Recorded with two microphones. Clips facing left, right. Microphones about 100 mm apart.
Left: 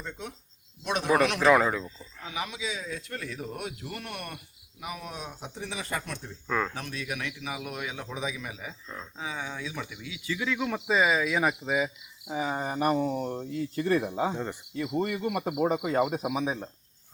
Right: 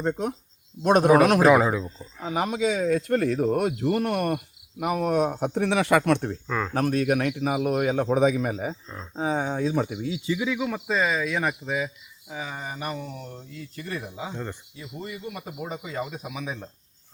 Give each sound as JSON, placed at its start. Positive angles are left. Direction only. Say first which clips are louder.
{"t": 0.0, "sound": "speech", "louder": "right 13 dB", "side_deg": -45}
{"t": 1.5, "sound": "speech", "louder": "right 3 dB", "side_deg": -10}
{"t": 2.0, "sound": "speech", "louder": "right 8 dB", "side_deg": -40}
{"t": 6.5, "sound": "speech", "louder": "left 1 dB", "side_deg": 0}
{"t": 6.7, "sound": "speech", "louder": "right 13 dB", "side_deg": -50}
{"t": 10.2, "sound": "speech", "louder": "right 2 dB", "side_deg": -15}
{"t": 10.8, "sound": "speech", "louder": "left 1 dB", "side_deg": 5}
{"t": 12.3, "sound": "speech", "louder": "left 4 dB", "side_deg": 25}
{"t": 12.7, "sound": "speech", "louder": "left 7 dB", "side_deg": 40}
{"t": 14.8, "sound": "speech", "louder": "left 11 dB", "side_deg": 60}
{"t": 16.3, "sound": "speech", "louder": "left 4 dB", "side_deg": 30}